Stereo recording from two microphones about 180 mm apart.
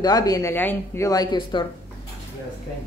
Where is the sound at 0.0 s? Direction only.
20° left (ahead or behind).